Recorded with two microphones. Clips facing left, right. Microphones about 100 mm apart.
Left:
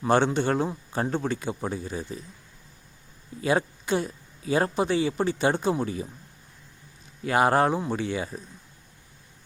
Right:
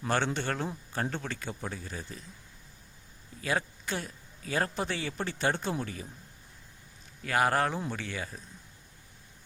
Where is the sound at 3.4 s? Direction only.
20° left (ahead or behind).